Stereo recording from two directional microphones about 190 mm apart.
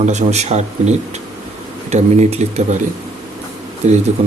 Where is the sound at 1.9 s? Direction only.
35° right (ahead or behind).